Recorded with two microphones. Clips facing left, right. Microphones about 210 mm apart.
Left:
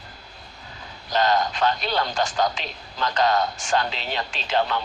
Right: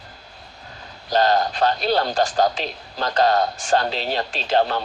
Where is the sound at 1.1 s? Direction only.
35° right (ahead or behind).